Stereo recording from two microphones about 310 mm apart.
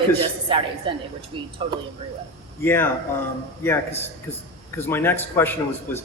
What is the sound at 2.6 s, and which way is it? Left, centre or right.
A man's voice, centre.